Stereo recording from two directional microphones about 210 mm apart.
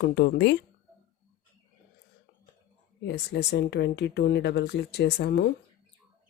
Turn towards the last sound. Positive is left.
turn(degrees=50)  # may be behind; listen again after turning